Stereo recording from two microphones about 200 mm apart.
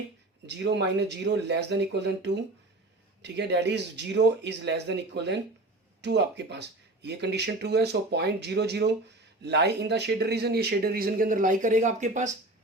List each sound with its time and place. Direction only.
0.4 s speech: 60° right (ahead or behind); by 12.3 s 35° right (ahead or behind)